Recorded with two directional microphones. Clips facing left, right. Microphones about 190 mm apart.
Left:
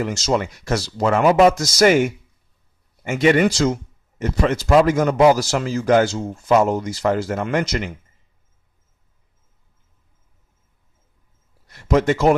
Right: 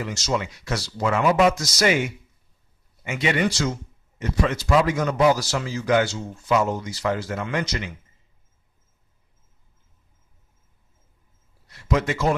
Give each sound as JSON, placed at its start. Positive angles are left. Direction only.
{"t": 0.0, "sound": "speech", "side_deg": 50}
{"t": 11.7, "sound": "a man's voice", "side_deg": 45}